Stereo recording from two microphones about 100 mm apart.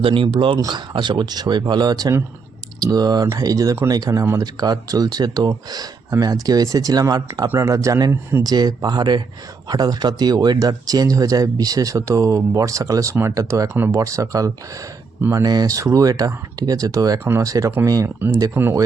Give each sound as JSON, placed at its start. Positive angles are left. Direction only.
{"t": 0.0, "sound": "speech", "side_deg": -60}
{"t": 8.4, "sound": "speech", "side_deg": -40}